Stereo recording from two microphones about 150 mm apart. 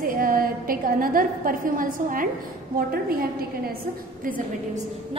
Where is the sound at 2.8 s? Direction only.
80° right.